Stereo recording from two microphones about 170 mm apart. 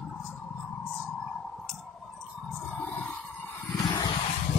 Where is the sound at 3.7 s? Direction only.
25° left (ahead or behind).